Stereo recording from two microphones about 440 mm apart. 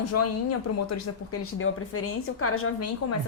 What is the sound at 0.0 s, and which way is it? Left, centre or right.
A woman's voice, left.